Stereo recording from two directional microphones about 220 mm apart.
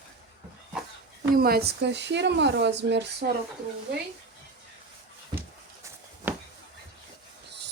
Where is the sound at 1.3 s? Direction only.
45° right (ahead or behind).